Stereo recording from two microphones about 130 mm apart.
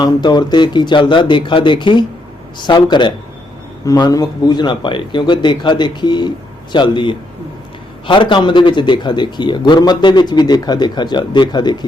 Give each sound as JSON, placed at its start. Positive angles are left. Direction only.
{"t": 0.0, "sound": "a man's voice", "side_deg": 35}